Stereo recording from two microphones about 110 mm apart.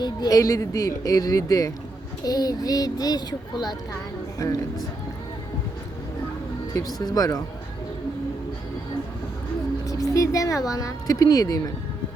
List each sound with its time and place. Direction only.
0.0 s speech: 35° left (ahead or behind)
6.7 s speech: 35° left (ahead or behind)
9.8 s speech: 30° left (ahead or behind)